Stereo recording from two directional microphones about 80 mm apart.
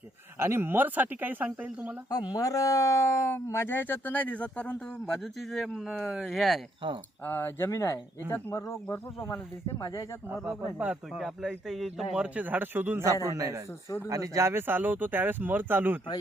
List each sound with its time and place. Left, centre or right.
0.3 s speech: right
2.3 s speech: left; by 6.6 s centre
7.3 s speech: left
9.8 s speech: left
11.2 s speech: centre
12.2 s speech: centre
13.2 s a man's voice: right